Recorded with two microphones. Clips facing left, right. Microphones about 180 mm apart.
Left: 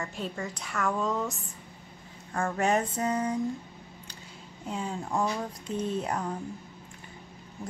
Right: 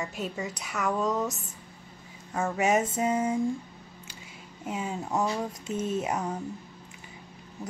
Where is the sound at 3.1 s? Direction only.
25° right (ahead or behind).